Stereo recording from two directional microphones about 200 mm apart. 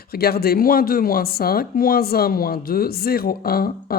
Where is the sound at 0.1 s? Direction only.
50° left (ahead or behind).